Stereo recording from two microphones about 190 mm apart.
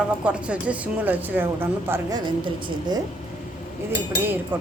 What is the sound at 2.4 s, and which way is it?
Speech, 20° right (ahead or behind).